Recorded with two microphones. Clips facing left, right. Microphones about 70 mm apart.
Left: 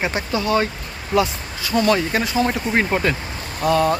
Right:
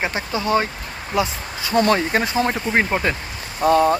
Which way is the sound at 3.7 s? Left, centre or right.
Right.